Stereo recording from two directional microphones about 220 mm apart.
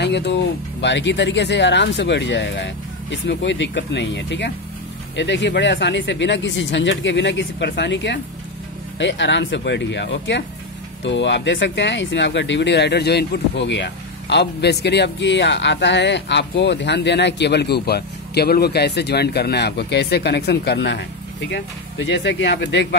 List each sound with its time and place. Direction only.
0.0 s speech: 50° left (ahead or behind)